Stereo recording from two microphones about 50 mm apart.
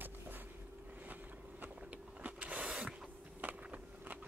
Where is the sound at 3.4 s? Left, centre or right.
Right.